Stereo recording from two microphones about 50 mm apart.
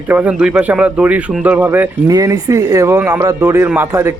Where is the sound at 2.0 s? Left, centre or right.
Right.